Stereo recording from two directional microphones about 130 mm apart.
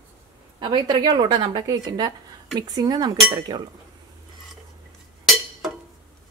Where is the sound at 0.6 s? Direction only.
35° right (ahead or behind).